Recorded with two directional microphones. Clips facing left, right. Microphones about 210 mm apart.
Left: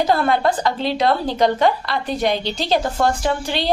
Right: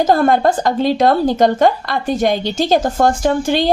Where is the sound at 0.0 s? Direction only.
45° right (ahead or behind).